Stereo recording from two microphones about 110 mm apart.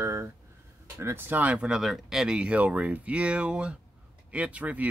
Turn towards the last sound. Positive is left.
turn(degrees=-15)  # may be behind; listen again after turning